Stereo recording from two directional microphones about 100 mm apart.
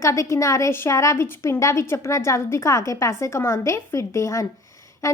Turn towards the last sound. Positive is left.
turn(degrees=30)  # may be behind; listen again after turning